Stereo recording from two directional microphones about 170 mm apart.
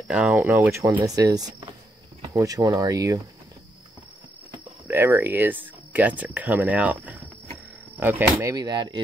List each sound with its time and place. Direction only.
0.1 s speech: 5° right (ahead or behind)
4.8 s speech: 15° right (ahead or behind)